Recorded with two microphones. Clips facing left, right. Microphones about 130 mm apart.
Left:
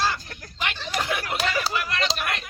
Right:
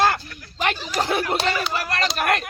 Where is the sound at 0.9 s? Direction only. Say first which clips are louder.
Right 4 dB; 40° right (ahead or behind).